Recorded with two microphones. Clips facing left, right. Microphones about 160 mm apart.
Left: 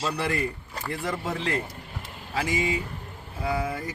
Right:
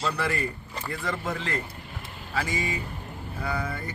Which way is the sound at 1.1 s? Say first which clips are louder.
Left 2 dB; 15° left (ahead or behind).